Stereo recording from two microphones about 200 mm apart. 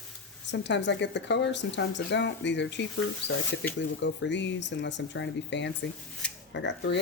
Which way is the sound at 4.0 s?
65° left (ahead or behind).